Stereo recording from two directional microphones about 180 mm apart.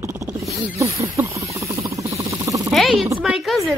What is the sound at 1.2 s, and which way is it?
Wild animals, 10° right (ahead or behind).